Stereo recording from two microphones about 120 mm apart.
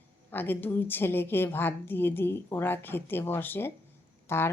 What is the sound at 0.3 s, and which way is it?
A woman's voice, 15° left (ahead or behind).